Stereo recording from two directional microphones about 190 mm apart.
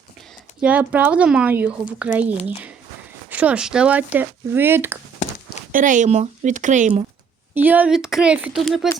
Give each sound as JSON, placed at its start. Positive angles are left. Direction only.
{"t": 0.6, "sound": "speech", "side_deg": -5}
{"t": 5.7, "sound": "speech", "side_deg": -40}
{"t": 7.5, "sound": "a woman's voice", "side_deg": -10}